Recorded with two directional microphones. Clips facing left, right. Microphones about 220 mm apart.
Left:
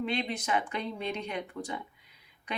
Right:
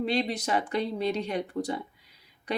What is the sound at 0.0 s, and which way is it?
Speech, 35° right (ahead or behind).